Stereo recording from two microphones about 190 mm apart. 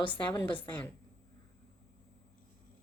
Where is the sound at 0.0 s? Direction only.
25° left (ahead or behind).